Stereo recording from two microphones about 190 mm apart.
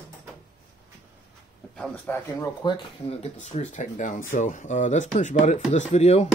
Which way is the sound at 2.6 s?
30° left (ahead or behind).